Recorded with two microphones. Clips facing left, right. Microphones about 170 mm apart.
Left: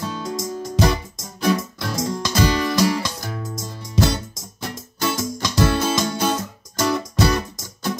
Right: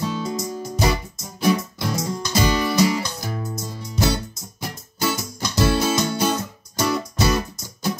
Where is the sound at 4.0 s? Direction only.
90° left.